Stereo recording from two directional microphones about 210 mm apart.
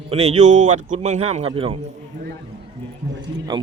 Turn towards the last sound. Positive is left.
turn(degrees=-55)  # may be behind; listen again after turning